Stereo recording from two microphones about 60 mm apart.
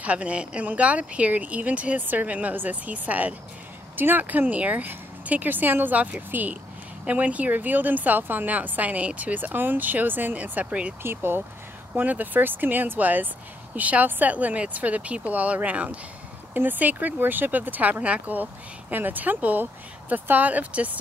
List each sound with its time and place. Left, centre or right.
0.0 s speech: right
11.0 s speech: right
11.9 s speech: right